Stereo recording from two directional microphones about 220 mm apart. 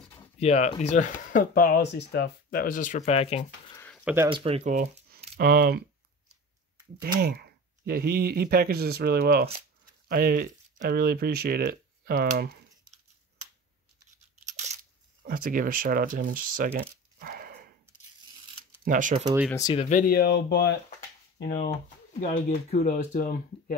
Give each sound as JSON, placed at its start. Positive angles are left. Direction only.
{"t": 0.4, "sound": "speech", "side_deg": 30}
{"t": 3.7, "sound": "a sound", "side_deg": 10}
{"t": 4.0, "sound": "speech", "side_deg": -10}
{"t": 4.3, "sound": "a sound", "side_deg": -25}
{"t": 7.2, "sound": "speech", "side_deg": -45}
{"t": 14.4, "sound": "crunch", "side_deg": -30}
{"t": 15.2, "sound": "speech", "side_deg": -40}
{"t": 17.2, "sound": "dog", "side_deg": -40}
{"t": 18.9, "sound": "speech", "side_deg": -35}
{"t": 19.2, "sound": "speech", "side_deg": -10}
{"t": 19.5, "sound": "speech", "side_deg": 15}
{"t": 19.8, "sound": "speech", "side_deg": 35}
{"t": 21.8, "sound": "speech", "side_deg": 35}